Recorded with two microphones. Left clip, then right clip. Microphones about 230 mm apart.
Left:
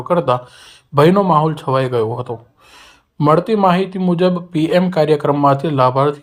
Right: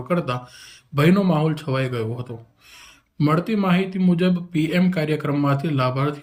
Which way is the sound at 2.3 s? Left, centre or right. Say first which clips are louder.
Left 11 dB; left.